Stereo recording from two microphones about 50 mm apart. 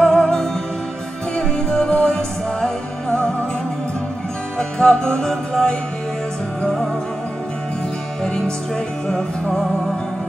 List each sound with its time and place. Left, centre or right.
0.0 s music: centre
1.7 s music: left
4.6 s music: centre
9.1 s music: centre